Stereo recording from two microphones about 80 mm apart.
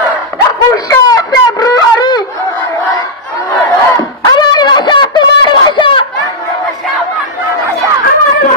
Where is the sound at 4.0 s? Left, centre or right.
Left.